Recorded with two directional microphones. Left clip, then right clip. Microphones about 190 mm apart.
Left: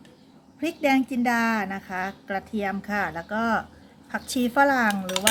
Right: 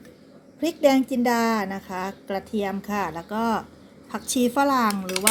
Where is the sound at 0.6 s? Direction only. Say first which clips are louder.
Right 3 dB; 10° left (ahead or behind).